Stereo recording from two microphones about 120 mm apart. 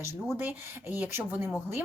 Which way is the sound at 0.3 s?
15° right (ahead or behind).